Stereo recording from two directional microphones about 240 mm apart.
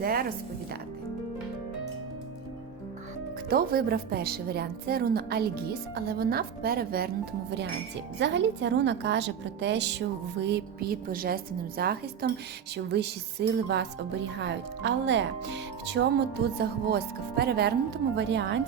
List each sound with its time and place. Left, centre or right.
0.0 s a woman's voice: right
3.5 s a woman's voice: right
8.2 s a woman's voice: right